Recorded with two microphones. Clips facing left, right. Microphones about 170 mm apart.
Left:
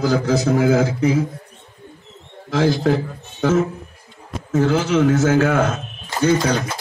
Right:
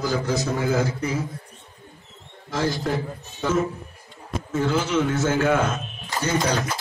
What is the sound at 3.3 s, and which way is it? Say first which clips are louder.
A man's voice: left 5 dB; 75° left (ahead or behind).